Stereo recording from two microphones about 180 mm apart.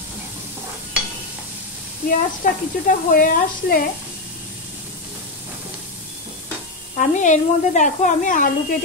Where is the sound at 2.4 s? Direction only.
50° left (ahead or behind).